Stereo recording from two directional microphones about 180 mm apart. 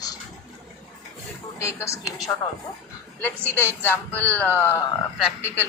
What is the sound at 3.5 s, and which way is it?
Speech, 10° left (ahead or behind).